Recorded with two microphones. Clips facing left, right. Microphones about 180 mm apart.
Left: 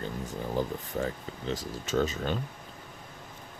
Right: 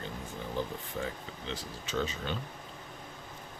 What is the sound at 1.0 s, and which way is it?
Speech, 45° left (ahead or behind).